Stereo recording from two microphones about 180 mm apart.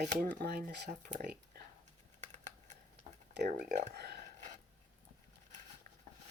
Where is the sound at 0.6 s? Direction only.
45° right (ahead or behind).